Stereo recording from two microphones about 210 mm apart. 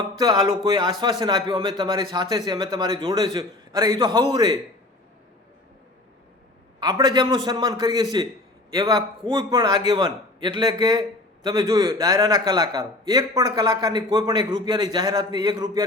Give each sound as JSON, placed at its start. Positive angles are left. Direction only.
{"t": 0.2, "sound": "a man's voice", "side_deg": -20}
{"t": 6.7, "sound": "a man's voice", "side_deg": -20}